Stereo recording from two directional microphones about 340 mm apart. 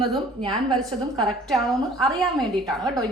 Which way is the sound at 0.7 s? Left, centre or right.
Centre.